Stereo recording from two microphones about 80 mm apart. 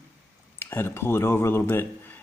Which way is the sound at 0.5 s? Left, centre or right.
Left.